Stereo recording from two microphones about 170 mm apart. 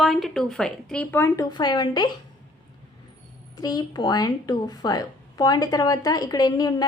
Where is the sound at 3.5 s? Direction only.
20° left (ahead or behind).